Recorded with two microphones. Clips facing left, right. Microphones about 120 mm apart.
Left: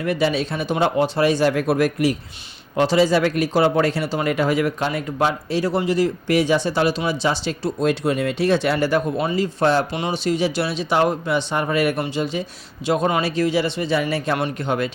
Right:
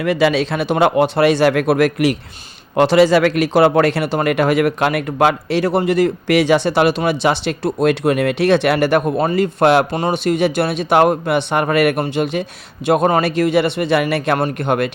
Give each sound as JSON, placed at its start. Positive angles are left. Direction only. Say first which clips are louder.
{"t": 0.0, "sound": "a man's voice", "louder": "right 5 dB", "side_deg": -90}
{"t": 2.7, "sound": "a man's voice", "louder": "right 5 dB", "side_deg": -65}
{"t": 9.9, "sound": "speech", "louder": "right 5 dB", "side_deg": -50}
{"t": 14.3, "sound": "speech", "louder": "right 5 dB", "side_deg": -50}